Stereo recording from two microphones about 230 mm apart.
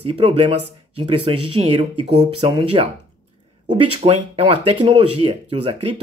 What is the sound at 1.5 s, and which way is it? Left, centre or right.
Speech, right.